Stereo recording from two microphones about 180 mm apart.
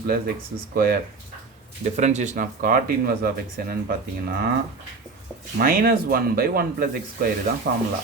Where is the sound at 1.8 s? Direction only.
40° right (ahead or behind); by 4.4 s 55° right (ahead or behind).